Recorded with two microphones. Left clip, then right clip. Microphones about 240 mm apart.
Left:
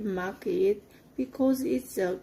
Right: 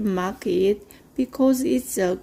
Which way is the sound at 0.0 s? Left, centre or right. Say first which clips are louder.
Right 6 dB; right.